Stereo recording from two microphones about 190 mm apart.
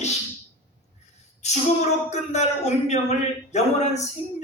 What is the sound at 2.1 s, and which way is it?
A man's voice, 35° left (ahead or behind).